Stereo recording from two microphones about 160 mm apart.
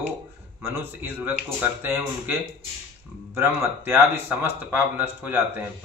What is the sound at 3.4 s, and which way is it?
Speech, 15° right (ahead or behind).